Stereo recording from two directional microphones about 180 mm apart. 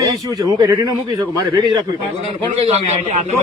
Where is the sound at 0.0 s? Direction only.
20° right (ahead or behind).